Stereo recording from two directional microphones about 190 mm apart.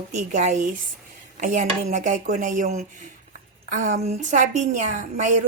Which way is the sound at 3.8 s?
35° right (ahead or behind).